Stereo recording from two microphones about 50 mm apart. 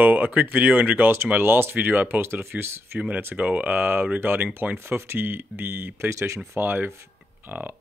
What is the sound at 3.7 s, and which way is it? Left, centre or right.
Speech, right.